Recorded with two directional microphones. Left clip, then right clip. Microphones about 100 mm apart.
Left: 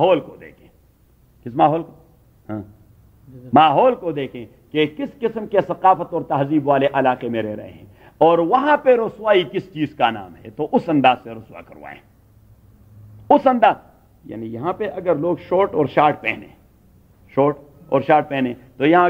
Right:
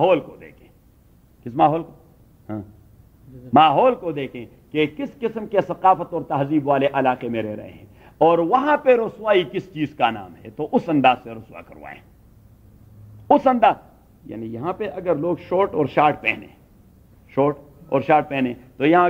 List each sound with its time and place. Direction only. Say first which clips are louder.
0.0 s a sound: left 2 dB; 45° left (ahead or behind)
1.4 s a man's voice: left 1 dB; 45° left (ahead or behind)
13.3 s a man's voice: left 2 dB; 45° left (ahead or behind)